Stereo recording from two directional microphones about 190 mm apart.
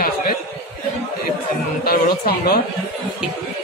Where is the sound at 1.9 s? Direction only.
55° left (ahead or behind).